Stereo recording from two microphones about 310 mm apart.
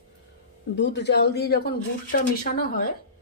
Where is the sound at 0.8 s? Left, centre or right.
Left.